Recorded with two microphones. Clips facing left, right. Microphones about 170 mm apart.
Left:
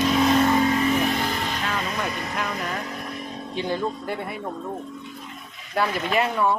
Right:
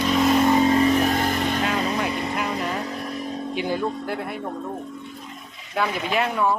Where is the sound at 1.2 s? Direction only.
45° right (ahead or behind).